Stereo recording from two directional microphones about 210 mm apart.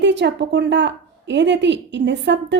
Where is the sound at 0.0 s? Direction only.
55° right (ahead or behind).